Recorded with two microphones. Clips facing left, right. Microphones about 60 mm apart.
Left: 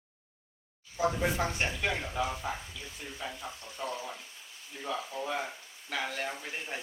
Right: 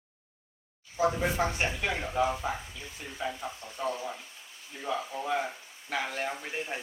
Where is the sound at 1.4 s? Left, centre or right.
Centre.